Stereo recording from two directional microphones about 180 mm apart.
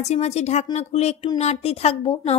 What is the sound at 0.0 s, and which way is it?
A child's voice, 40° left (ahead or behind).